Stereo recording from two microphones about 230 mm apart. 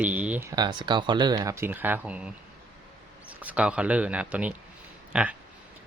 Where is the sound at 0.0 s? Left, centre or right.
Centre.